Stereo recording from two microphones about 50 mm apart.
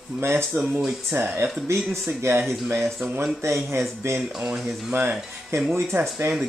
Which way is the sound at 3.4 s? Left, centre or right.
Right.